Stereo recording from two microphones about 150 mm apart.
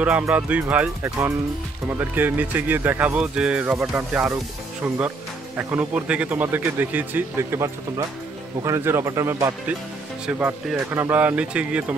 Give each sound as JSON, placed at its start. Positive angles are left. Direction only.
{"t": 0.0, "sound": "speech", "side_deg": -10}
{"t": 5.6, "sound": "speech", "side_deg": -10}
{"t": 10.2, "sound": "speech", "side_deg": -5}